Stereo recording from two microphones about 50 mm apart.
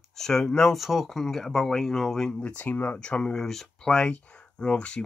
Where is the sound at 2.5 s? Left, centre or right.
Left.